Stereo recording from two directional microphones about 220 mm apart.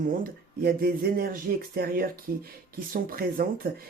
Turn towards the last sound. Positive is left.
turn(degrees=-40)  # may be behind; listen again after turning